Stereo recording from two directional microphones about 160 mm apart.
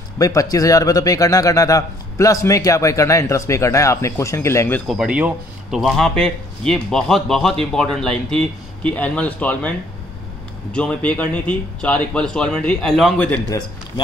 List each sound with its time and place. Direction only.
0.2 s a man's voice: 20° left (ahead or behind)
4.8 s a man's voice: 5° right (ahead or behind)